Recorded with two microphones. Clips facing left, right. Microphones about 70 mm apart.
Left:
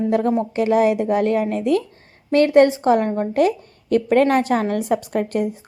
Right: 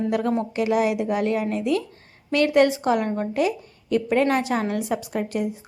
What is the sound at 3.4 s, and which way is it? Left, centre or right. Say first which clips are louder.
A woman's voice: left 7 dB; left.